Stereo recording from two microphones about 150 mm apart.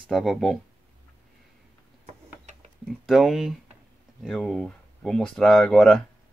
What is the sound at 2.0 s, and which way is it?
Mechanisms, 50° right (ahead or behind).